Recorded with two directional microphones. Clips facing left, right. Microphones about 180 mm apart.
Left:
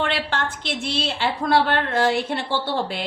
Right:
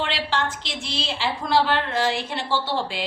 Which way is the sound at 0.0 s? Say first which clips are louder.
Left 1 dB; 55° left (ahead or behind).